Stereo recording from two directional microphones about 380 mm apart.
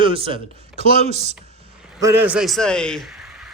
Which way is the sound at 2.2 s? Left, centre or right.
Centre.